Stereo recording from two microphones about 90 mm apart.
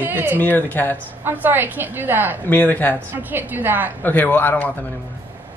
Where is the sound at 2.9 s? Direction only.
20° right (ahead or behind).